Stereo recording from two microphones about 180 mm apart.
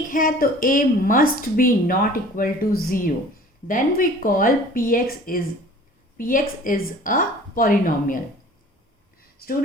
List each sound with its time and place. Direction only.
0.1 s a woman's voice: 50° left (ahead or behind)